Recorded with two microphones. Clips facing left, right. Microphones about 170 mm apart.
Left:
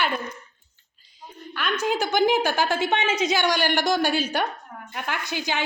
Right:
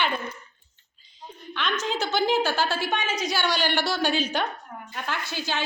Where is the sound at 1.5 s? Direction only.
10° left (ahead or behind).